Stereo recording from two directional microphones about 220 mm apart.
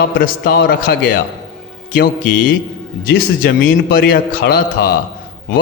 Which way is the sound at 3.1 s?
45° left (ahead or behind).